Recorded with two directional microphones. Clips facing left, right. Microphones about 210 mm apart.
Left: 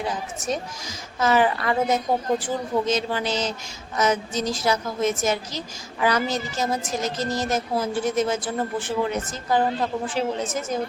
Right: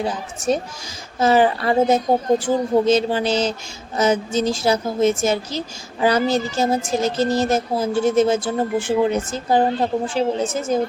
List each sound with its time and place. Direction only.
0.0 s a woman's voice: 30° right (ahead or behind)